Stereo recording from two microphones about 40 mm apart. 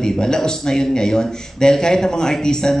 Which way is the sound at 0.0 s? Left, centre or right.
Centre.